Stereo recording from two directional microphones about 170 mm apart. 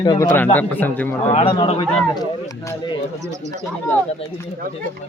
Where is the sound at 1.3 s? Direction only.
40° left (ahead or behind).